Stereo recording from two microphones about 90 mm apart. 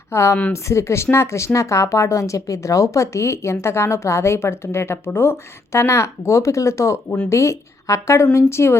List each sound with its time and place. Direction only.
0.1 s a woman's voice: 35° left (ahead or behind)